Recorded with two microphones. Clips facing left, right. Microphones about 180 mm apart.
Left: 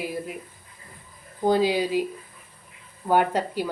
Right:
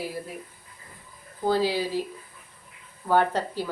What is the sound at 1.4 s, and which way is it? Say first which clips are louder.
Speech: left 3 dB; 15° left (ahead or behind).